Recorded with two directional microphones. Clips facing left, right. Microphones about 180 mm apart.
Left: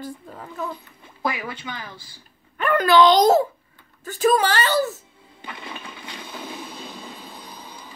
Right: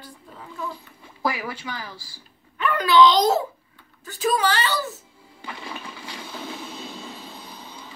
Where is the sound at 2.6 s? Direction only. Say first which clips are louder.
Left 1 dB; 50° left (ahead or behind).